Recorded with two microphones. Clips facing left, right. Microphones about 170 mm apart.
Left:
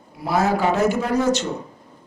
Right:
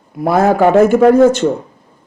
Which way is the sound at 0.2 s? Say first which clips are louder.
Right 9 dB; 55° right (ahead or behind).